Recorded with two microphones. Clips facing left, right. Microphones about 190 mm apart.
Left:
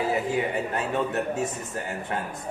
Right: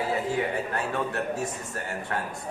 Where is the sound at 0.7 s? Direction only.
20° left (ahead or behind).